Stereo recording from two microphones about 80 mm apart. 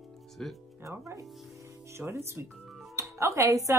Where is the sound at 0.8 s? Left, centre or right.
Right.